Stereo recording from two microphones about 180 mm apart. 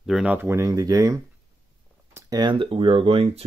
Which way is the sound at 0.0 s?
5° right (ahead or behind).